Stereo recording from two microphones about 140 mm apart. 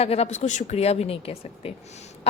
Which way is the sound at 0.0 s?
45° left (ahead or behind).